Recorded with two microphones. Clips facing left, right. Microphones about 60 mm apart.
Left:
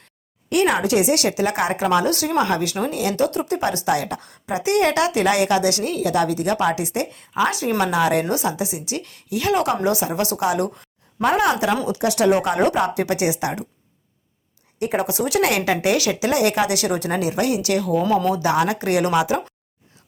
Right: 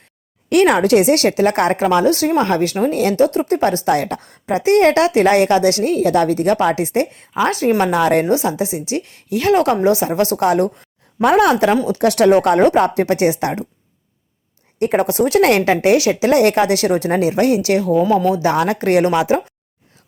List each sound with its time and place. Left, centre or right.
0.5 s speech: right
1.8 s a woman's voice: right
8.3 s a woman's voice: right
11.2 s speech: right
11.9 s speech: right
12.5 s a woman's voice: right
14.8 s a woman's voice: right